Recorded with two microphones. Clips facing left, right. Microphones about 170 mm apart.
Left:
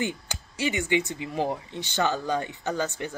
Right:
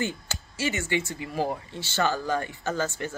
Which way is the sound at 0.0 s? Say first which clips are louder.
Even; 15° left (ahead or behind).